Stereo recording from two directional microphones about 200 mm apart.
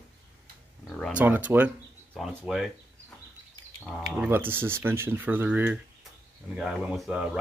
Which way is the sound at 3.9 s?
Centre (ahead or behind).